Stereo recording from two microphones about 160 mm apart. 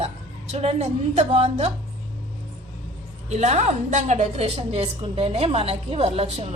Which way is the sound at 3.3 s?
45° right (ahead or behind).